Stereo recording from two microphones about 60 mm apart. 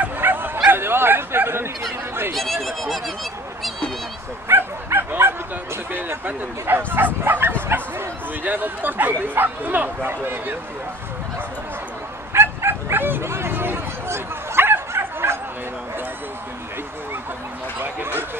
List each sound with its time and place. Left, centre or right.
0.0 s bow-wow: right
2.3 s speech: centre
4.5 s bow-wow: right
5.9 s speech: right
12.3 s bow-wow: right
17.7 s a sound: right